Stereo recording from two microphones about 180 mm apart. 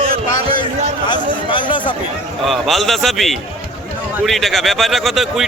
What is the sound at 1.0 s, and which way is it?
Chatter, 25° left (ahead or behind).